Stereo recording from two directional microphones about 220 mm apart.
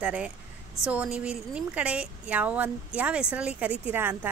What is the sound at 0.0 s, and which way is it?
A woman's voice, 5° right (ahead or behind).